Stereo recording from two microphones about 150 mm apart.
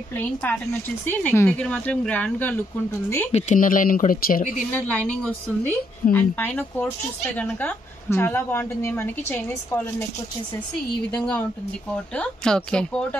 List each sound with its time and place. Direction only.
0.2 s a woman's voice: 10° left (ahead or behind)
3.3 s speech: 50° left (ahead or behind)
3.5 s speech: 65° left (ahead or behind)
4.7 s a woman's voice: 10° left (ahead or behind)
11.1 s a woman's voice: 5° left (ahead or behind)